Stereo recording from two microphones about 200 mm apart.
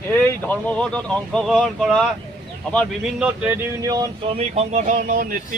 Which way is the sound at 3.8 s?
20° right (ahead or behind).